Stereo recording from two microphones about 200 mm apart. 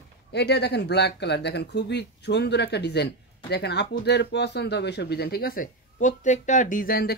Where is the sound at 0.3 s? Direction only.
55° left (ahead or behind).